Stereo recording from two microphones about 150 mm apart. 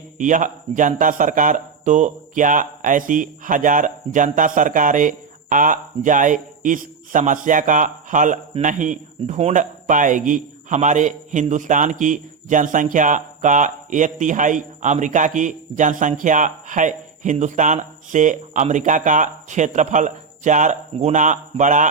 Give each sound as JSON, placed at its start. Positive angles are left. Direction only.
{"t": 0.2, "sound": "speech", "side_deg": -60}